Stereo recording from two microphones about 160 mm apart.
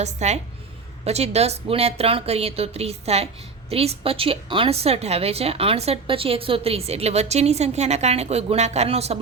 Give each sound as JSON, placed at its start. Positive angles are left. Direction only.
{"t": 0.0, "sound": "a woman's voice", "side_deg": -45}